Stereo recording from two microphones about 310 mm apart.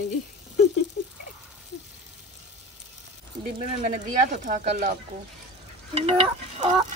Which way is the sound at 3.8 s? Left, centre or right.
Right.